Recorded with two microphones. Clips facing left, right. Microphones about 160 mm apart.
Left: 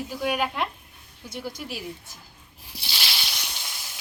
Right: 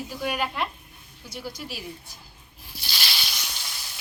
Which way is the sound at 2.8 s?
20° left (ahead or behind).